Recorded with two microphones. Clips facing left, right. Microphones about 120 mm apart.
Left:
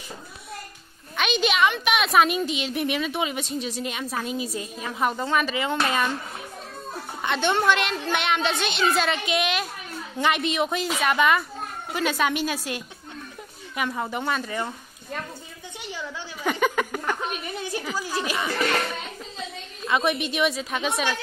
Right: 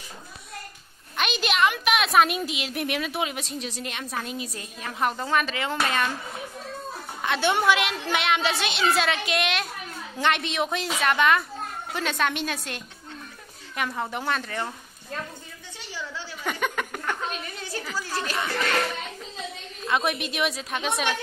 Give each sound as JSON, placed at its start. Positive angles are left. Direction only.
{"t": 1.1, "sound": "a woman's voice", "side_deg": 0}
{"t": 7.2, "sound": "a woman's voice", "side_deg": 0}
{"t": 15.8, "sound": "a sound", "side_deg": 15}
{"t": 16.4, "sound": "a sound", "side_deg": 0}
{"t": 17.0, "sound": "speech", "side_deg": 15}
{"t": 19.9, "sound": "a woman's voice", "side_deg": 0}